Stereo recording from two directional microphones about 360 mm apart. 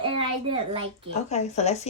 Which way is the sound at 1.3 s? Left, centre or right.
Centre.